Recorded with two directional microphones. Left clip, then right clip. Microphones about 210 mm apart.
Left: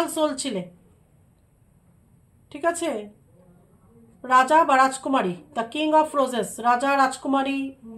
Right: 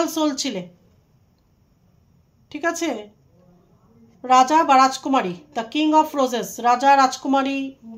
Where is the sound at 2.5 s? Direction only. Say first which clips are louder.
Right 1 dB; 35° right (ahead or behind).